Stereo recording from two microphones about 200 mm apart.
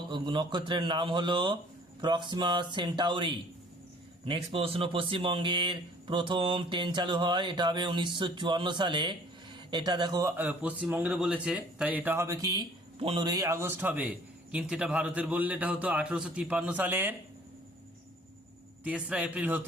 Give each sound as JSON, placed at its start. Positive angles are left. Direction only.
{"t": 0.1, "sound": "speech", "side_deg": -25}
{"t": 18.9, "sound": "a man's voice", "side_deg": -5}